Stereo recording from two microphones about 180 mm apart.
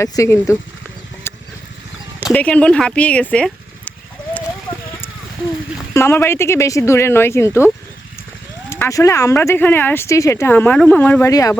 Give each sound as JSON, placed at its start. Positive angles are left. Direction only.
{"t": 0.0, "sound": "speech", "side_deg": 15}
{"t": 1.3, "sound": "a sound", "side_deg": 15}
{"t": 2.3, "sound": "speech", "side_deg": 5}
{"t": 5.9, "sound": "speech", "side_deg": 15}
{"t": 8.7, "sound": "speech", "side_deg": 15}